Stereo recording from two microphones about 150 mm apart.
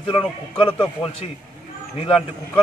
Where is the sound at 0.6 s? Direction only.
40° left (ahead or behind).